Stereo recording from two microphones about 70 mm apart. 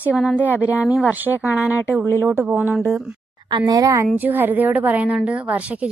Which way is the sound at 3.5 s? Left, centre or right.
Right.